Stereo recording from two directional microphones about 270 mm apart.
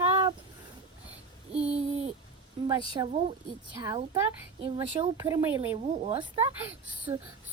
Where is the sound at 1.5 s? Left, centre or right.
Right.